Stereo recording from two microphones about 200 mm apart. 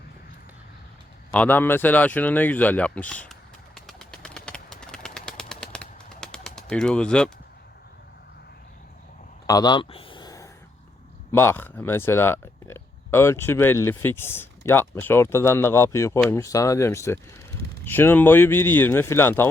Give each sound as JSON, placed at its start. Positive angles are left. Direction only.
{"t": 1.3, "sound": "speech", "side_deg": 10}
{"t": 3.8, "sound": "bird", "side_deg": 0}
{"t": 9.5, "sound": "a sound", "side_deg": 20}
{"t": 11.3, "sound": "speech", "side_deg": 10}